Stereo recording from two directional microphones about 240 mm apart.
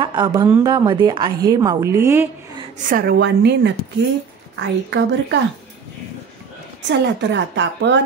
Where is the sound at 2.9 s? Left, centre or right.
Right.